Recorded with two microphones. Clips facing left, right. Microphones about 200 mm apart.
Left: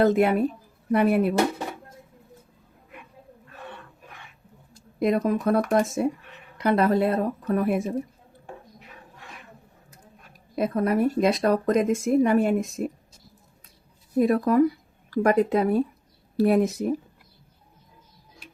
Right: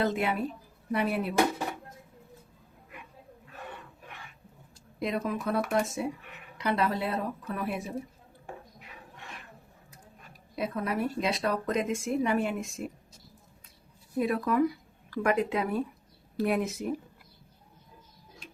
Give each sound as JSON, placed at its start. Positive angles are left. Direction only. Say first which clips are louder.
{"t": 0.0, "sound": "speech", "louder": "left 9 dB", "side_deg": 50}
{"t": 4.9, "sound": "speech", "louder": "left 9 dB", "side_deg": 50}
{"t": 10.5, "sound": "speech", "louder": "left 8 dB", "side_deg": 45}
{"t": 14.2, "sound": "speech", "louder": "left 7 dB", "side_deg": 45}
{"t": 18.4, "sound": "tick-tock", "louder": "even", "side_deg": 10}